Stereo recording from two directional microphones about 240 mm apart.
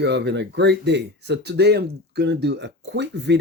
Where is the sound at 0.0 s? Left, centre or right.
Right.